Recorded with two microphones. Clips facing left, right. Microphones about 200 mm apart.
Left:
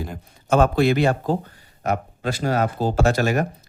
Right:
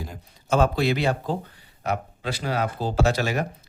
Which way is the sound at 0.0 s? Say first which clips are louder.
Left 5 dB; 55° left (ahead or behind).